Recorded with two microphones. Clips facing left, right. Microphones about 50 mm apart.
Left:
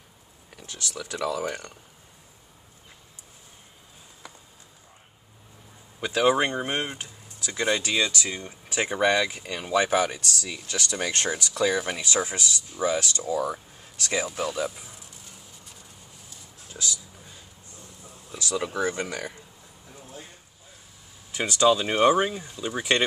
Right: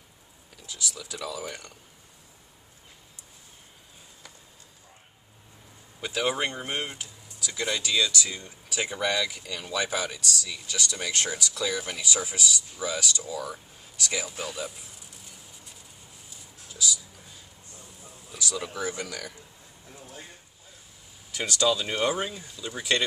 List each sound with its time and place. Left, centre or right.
0.6 s speech: left
5.9 s speech: left
16.6 s speech: left
18.3 s speech: left
21.3 s speech: left